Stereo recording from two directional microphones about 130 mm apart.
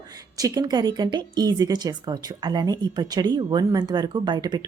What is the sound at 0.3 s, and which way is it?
Speech, 30° right (ahead or behind).